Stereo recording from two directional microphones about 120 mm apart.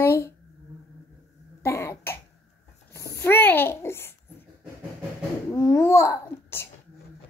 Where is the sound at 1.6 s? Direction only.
25° left (ahead or behind).